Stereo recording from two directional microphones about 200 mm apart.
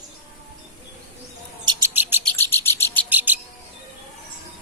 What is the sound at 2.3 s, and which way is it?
Cricket, 10° left (ahead or behind).